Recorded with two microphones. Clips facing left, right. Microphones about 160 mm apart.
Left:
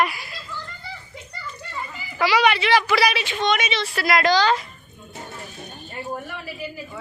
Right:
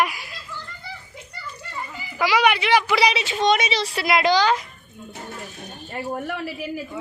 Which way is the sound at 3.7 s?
35° right (ahead or behind).